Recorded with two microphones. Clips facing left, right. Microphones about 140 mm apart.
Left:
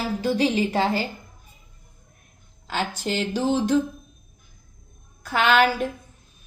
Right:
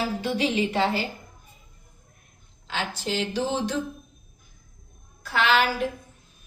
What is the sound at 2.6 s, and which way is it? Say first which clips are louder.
Speech: left 3 dB; 45° left (ahead or behind).